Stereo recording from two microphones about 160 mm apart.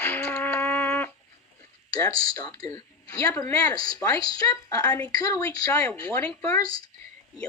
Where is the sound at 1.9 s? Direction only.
25° left (ahead or behind).